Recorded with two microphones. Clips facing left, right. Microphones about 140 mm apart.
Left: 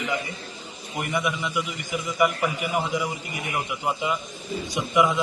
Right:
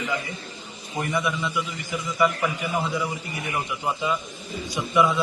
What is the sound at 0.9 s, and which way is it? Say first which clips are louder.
A man's voice: right 1 dB; 15° left (ahead or behind).